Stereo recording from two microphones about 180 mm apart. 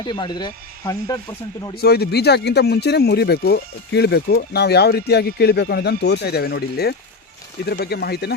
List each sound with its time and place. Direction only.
0.0 s speech: 25° left (ahead or behind)
1.8 s speech: 60° left (ahead or behind)